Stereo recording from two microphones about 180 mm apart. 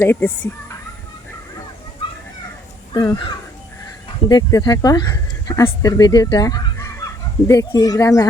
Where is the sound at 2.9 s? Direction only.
20° left (ahead or behind).